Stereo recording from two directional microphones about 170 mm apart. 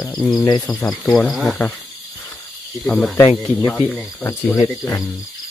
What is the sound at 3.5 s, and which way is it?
Speech, 45° left (ahead or behind).